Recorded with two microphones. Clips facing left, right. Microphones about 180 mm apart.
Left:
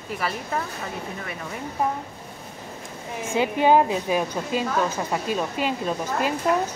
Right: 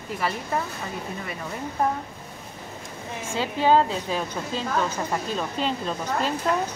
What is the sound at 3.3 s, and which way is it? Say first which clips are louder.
A woman's voice: left 2 dB; 15° left (ahead or behind).